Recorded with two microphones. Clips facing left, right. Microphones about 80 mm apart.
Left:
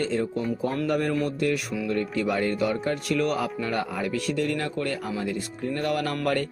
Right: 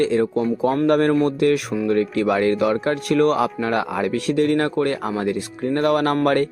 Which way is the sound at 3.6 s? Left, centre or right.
Right.